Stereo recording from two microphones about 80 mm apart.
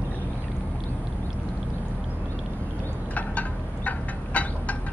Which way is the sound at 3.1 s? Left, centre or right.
Centre.